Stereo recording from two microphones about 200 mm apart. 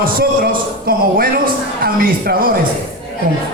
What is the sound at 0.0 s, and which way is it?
A man's voice, 45° right (ahead or behind).